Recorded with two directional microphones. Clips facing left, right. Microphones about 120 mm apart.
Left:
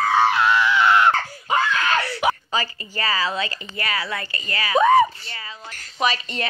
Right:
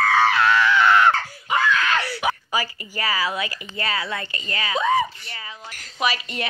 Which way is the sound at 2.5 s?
15° right (ahead or behind).